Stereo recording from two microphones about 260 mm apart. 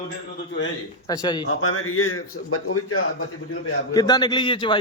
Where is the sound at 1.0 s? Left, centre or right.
Centre.